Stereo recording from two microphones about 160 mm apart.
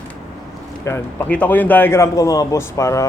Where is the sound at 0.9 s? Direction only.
15° left (ahead or behind).